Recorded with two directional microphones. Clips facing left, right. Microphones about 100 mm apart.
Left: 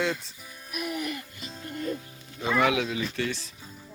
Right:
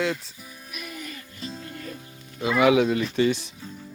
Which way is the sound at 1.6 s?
20° left (ahead or behind).